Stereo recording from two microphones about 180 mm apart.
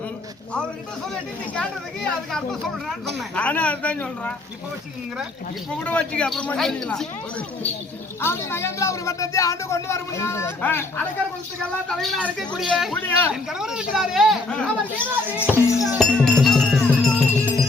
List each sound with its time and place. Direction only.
3.2 s speech: 5° left (ahead or behind)
5.8 s speech: 5° left (ahead or behind)
8.2 s speech: 15° left (ahead or behind)
13.5 s speech: 5° right (ahead or behind)
14.9 s speech: 10° right (ahead or behind)
16.0 s speech: centre (ahead or behind)
16.4 s music: centre (ahead or behind)